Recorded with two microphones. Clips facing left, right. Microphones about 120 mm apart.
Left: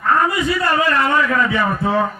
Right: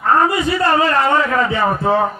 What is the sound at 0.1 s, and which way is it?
A man's voice, 25° right (ahead or behind).